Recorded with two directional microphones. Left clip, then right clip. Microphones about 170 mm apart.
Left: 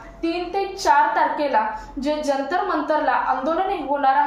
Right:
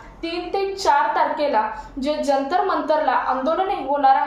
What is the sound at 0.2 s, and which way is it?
A woman's voice, 20° right (ahead or behind).